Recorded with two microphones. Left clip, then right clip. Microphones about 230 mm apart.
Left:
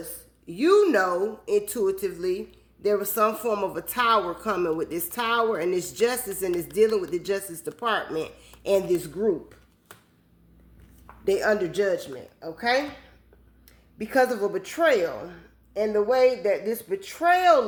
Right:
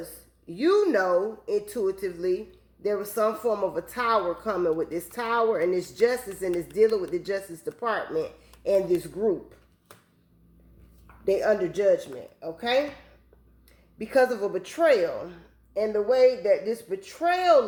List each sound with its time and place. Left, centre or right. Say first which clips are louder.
0.4 s speech: left 3 dB; left
11.0 s a woman's voice: even; left
14.0 s speech: even; left